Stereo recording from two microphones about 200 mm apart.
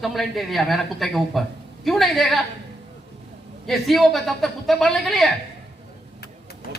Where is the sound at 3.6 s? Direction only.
Centre (ahead or behind).